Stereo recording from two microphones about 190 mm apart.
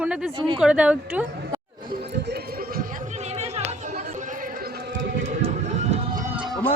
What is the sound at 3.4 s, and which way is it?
Chatter, 35° right (ahead or behind).